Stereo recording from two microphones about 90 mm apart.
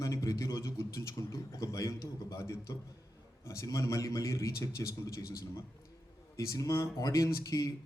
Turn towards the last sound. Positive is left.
turn(degrees=40)  # may be behind; listen again after turning